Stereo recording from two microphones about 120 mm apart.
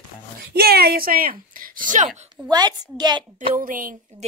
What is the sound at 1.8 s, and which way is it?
Speech, 90° right.